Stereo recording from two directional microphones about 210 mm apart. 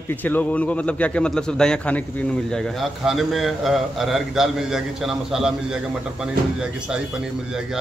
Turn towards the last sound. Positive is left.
turn(degrees=-5)  # may be behind; listen again after turning